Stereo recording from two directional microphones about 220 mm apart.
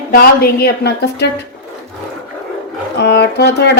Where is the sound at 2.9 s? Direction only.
50° left (ahead or behind).